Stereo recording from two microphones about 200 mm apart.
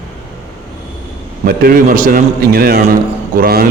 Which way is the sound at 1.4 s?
50° right (ahead or behind).